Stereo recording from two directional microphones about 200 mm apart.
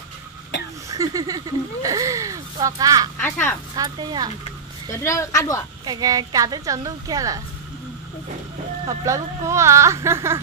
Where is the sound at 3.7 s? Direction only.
20° right (ahead or behind).